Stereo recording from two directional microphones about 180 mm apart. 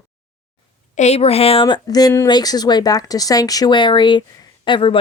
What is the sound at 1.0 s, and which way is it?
Speech, 35° left (ahead or behind).